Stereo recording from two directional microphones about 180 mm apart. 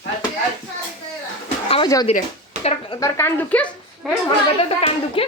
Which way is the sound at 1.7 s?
25° left (ahead or behind).